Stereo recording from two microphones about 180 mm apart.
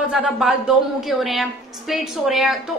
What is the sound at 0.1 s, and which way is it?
A woman's voice, centre (ahead or behind).